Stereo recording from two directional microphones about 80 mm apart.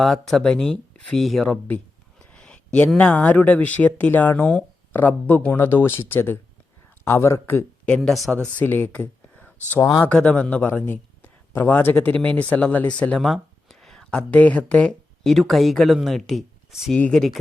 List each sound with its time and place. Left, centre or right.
0.0 s speech: centre
1.5 s speech: centre
2.3 s a sound: centre
3.0 s speech: centre; by 7.6 s left
8.1 s speech: centre
8.5 s a man's voice: left
13.1 s speech: centre